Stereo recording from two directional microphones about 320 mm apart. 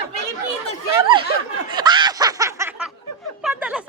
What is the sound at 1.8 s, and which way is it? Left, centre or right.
Snicker, centre.